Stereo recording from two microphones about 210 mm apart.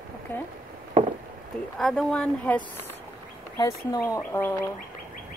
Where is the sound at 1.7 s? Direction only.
Centre (ahead or behind).